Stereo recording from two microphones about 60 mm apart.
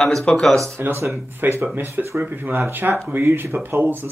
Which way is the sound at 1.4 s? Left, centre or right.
Right.